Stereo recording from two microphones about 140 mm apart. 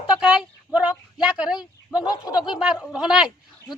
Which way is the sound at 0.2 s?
5° right (ahead or behind).